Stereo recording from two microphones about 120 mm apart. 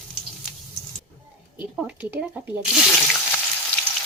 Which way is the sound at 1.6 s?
10° right (ahead or behind).